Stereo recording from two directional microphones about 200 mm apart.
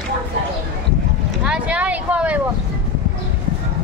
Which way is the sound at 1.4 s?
5° right (ahead or behind).